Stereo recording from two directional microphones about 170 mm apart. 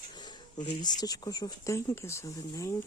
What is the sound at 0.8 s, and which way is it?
Speech, 25° left (ahead or behind).